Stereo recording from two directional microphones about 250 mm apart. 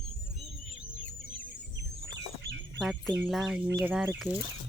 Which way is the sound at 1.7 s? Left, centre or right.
Right.